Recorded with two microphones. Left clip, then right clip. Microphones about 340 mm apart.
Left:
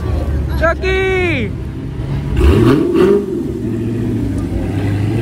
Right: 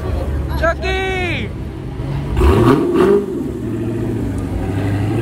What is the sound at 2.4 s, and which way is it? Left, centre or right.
Vehicle, centre.